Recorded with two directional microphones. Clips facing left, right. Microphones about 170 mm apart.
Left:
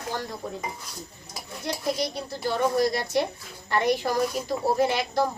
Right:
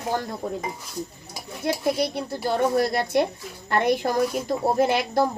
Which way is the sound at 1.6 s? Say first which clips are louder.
Right 5 dB; 55° right (ahead or behind).